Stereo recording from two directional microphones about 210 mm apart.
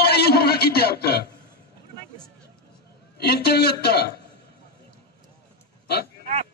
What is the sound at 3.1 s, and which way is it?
Speech, 50° left (ahead or behind).